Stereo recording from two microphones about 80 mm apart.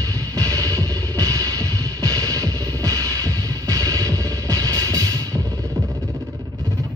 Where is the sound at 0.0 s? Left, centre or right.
Right.